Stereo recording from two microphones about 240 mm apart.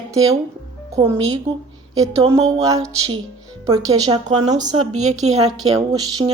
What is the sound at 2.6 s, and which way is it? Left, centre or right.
A woman's voice, centre.